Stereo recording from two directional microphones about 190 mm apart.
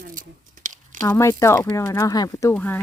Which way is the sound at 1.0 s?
15° left (ahead or behind).